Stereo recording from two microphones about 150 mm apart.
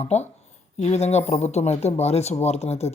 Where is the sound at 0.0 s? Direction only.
45° left (ahead or behind).